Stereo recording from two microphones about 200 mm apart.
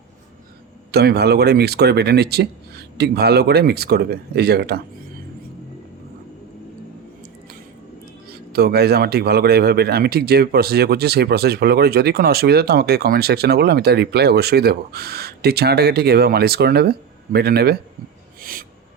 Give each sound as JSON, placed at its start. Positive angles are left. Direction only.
{"t": 0.9, "sound": "speech", "side_deg": -55}
{"t": 8.3, "sound": "speech", "side_deg": -50}